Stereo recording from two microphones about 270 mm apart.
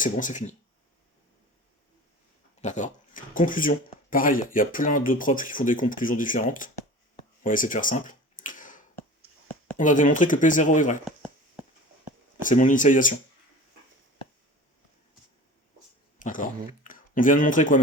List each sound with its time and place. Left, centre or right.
0.0 s speech: left
2.6 s speech: left
7.2 s a sound: left
9.7 s speech: left
11.0 s a sound: centre
12.4 s speech: left
16.1 s speech: left